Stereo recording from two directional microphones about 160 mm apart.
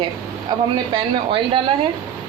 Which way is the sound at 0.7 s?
30° right (ahead or behind).